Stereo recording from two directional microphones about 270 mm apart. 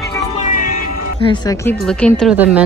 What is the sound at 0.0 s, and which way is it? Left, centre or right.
Music, centre.